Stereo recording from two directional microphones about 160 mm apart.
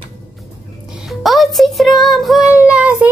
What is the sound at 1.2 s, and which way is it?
A woman's voice, centre (ahead or behind).